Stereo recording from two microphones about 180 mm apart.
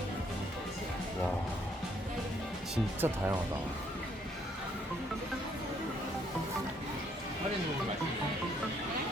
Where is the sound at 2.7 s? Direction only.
10° right (ahead or behind).